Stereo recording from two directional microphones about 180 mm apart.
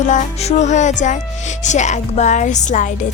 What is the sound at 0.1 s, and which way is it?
Speech, 40° left (ahead or behind).